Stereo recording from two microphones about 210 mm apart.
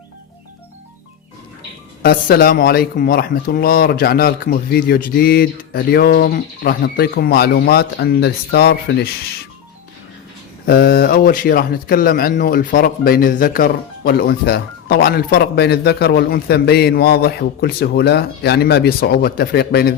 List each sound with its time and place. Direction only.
2.0 s a man's voice: 45° left (ahead or behind)
10.7 s a man's voice: 50° left (ahead or behind)